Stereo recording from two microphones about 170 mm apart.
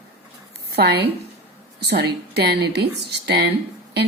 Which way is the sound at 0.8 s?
75° right (ahead or behind).